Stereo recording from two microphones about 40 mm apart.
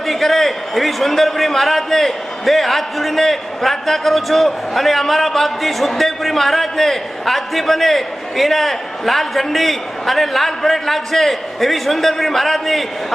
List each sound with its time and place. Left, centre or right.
0.0 s a man's voice: centre